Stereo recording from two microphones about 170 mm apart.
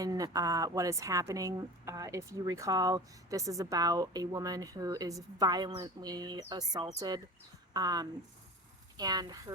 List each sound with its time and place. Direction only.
0.0 s a woman's voice: 20° right (ahead or behind)